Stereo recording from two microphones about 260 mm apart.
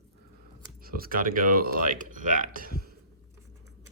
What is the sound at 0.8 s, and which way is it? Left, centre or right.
Speech, right.